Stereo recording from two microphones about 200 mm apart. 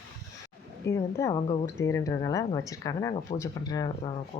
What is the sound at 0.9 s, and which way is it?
Speech, 15° left (ahead or behind).